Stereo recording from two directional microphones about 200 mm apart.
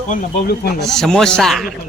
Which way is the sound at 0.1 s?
40° left (ahead or behind).